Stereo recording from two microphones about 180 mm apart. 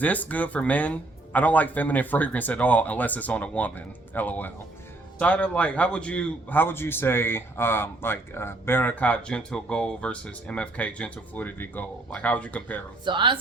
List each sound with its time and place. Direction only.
0.0 s a man's voice: 10° left (ahead or behind)
13.1 s speech: 25° right (ahead or behind)